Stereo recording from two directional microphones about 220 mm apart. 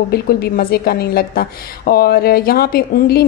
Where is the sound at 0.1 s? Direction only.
45° left (ahead or behind).